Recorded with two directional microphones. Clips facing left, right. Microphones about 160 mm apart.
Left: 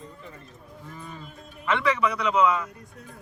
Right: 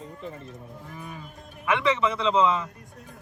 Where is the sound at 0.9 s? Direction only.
15° right (ahead or behind).